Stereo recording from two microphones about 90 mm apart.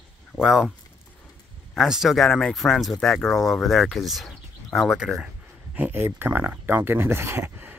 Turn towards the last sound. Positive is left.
turn(degrees=-25)  # may be behind; listen again after turning